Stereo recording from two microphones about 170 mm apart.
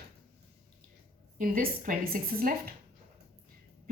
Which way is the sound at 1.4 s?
55° right (ahead or behind).